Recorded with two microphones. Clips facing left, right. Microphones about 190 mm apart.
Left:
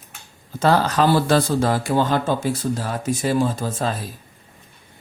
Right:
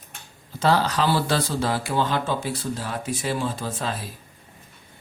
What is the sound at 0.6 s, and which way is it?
Speech, 50° left (ahead or behind).